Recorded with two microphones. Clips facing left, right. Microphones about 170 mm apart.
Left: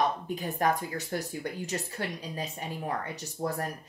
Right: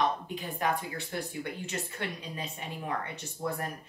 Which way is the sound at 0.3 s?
45° left (ahead or behind).